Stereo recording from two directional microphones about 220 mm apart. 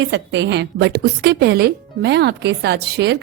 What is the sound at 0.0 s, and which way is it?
A woman's voice, 55° right (ahead or behind).